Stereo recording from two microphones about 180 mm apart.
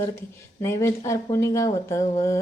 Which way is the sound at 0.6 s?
15° left (ahead or behind).